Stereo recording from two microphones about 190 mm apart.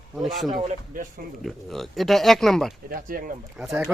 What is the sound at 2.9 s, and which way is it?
Speech, 45° right (ahead or behind).